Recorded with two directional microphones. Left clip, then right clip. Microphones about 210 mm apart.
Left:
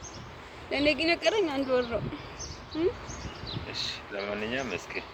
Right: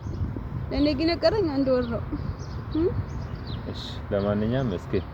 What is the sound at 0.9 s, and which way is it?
Speech, 10° left (ahead or behind).